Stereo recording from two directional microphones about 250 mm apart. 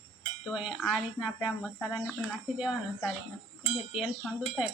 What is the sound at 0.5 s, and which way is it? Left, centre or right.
Speech, centre.